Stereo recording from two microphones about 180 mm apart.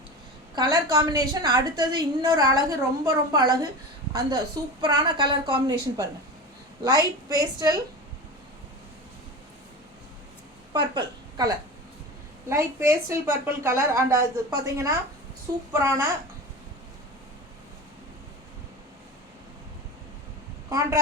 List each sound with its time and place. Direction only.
0.5 s a woman's voice: 20° right (ahead or behind)
4.8 s a woman's voice: 25° right (ahead or behind)
10.7 s a woman's voice: 25° right (ahead or behind)
20.7 s a woman's voice: 20° right (ahead or behind)